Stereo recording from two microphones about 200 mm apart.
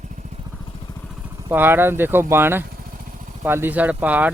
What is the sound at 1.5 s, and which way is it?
Speech, 10° right (ahead or behind).